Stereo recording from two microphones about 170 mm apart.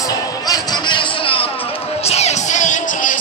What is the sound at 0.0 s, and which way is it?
Music, 20° left (ahead or behind).